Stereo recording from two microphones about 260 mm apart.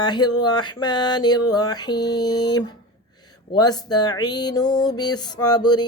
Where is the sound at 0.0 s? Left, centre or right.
Centre.